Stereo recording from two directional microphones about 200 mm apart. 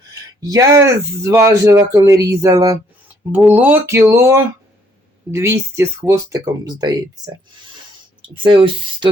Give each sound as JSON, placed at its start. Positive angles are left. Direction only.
{"t": 0.3, "sound": "speech", "side_deg": -15}
{"t": 8.4, "sound": "speech", "side_deg": -25}